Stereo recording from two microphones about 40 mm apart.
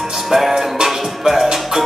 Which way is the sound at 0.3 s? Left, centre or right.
Centre.